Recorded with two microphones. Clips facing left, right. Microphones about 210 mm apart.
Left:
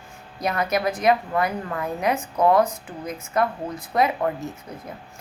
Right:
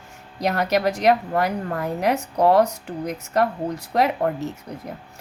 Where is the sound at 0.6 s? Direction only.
70° right (ahead or behind).